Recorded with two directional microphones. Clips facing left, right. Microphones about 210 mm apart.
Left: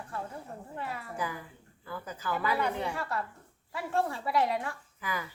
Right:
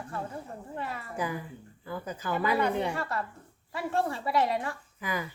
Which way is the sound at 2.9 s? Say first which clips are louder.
Right 2 dB; centre (ahead or behind).